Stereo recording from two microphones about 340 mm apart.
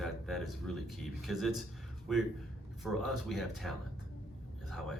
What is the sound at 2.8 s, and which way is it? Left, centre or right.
Speech, centre.